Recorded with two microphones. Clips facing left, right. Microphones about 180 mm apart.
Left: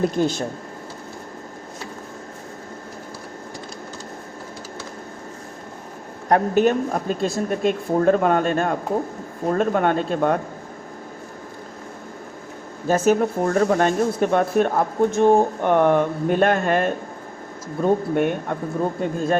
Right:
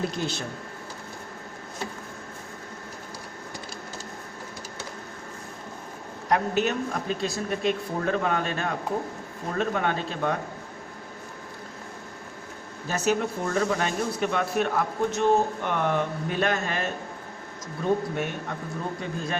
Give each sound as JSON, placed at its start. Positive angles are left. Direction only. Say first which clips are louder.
{"t": 0.0, "sound": "speech", "louder": "left 9 dB", "side_deg": 45}
{"t": 6.2, "sound": "speech", "louder": "left 7 dB", "side_deg": 50}
{"t": 12.9, "sound": "speech", "louder": "left 8 dB", "side_deg": 50}